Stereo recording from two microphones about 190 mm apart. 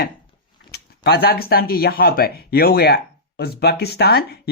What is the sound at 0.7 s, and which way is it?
Speech, 55° left (ahead or behind).